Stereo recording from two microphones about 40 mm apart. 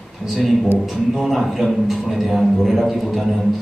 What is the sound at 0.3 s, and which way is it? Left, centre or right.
A man's voice, centre.